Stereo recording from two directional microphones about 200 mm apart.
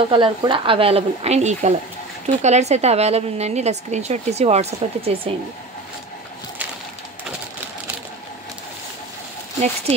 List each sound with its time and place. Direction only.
0.1 s a woman's voice: 25° right (ahead or behind)